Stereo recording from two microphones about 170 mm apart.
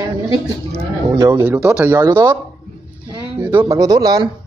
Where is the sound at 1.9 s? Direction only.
20° right (ahead or behind).